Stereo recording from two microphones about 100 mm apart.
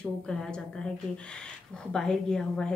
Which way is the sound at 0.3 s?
10° left (ahead or behind).